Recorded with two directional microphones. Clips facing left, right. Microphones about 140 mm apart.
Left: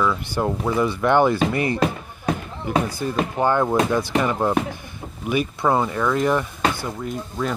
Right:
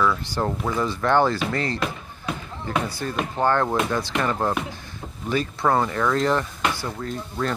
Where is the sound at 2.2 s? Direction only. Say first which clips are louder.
Left 6 dB; 45° left (ahead or behind).